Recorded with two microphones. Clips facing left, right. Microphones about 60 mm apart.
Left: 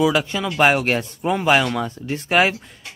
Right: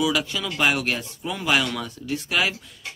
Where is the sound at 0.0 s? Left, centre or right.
Left.